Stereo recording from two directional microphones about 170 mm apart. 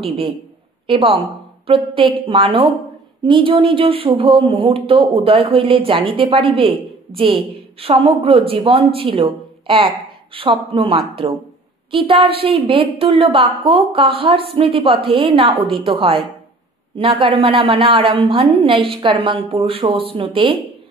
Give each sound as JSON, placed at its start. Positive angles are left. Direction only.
{"t": 0.8, "sound": "speech", "side_deg": -30}